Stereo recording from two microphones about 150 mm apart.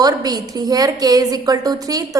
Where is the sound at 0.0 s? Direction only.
25° right (ahead or behind).